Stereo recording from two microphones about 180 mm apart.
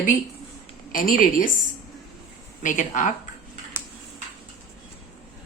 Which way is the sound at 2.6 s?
45° left (ahead or behind).